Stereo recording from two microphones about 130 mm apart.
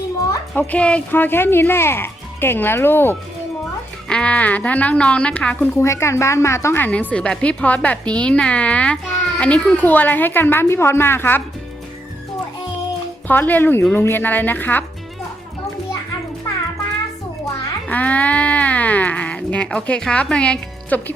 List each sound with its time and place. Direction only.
0.7 s a woman's voice: 10° left (ahead or behind)
5.7 s a woman's voice: 20° left (ahead or behind)
13.2 s a woman's voice: 15° left (ahead or behind)
17.8 s speech: 10° left (ahead or behind)